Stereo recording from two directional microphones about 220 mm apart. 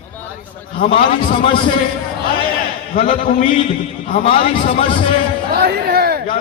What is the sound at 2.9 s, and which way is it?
A man's voice, 35° left (ahead or behind).